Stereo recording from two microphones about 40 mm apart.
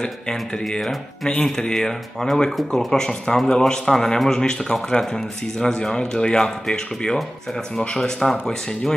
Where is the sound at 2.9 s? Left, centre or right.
Centre.